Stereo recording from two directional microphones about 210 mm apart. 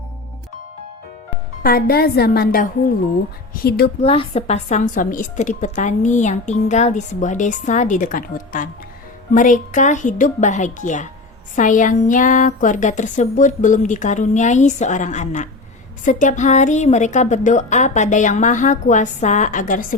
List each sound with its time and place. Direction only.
1.6 s a woman's voice: 45° left (ahead or behind)
4.0 s a woman's voice: 30° left (ahead or behind)